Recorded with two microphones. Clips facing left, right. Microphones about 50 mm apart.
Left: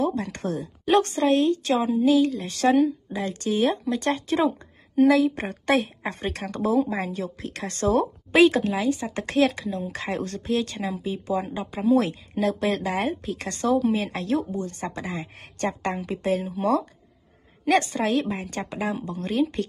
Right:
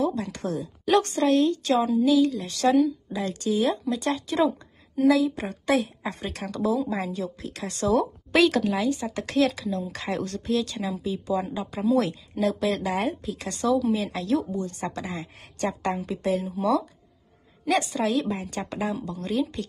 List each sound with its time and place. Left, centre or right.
0.0 s speech: left
8.4 s a woman's voice: left
16.3 s speech: left